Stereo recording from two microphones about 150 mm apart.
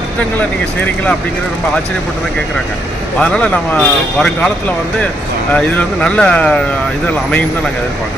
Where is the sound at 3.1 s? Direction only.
5° left (ahead or behind).